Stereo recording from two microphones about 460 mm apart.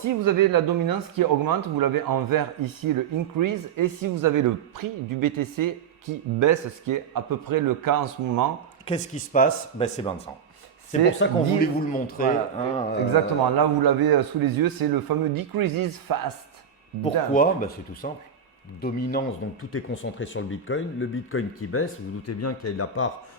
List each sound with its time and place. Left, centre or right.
0.0 s speech: right
8.9 s speech: centre
11.2 s speech: centre
13.6 s speech: right
17.3 s speech: centre